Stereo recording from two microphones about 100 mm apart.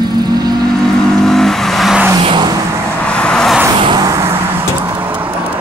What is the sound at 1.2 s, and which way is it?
Vehicle, 5° left (ahead or behind).